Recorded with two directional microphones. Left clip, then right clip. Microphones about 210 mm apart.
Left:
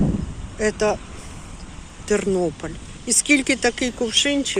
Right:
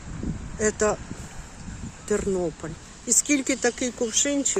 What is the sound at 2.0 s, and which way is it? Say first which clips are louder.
Speech: left 5 dB; 10° right (ahead or behind).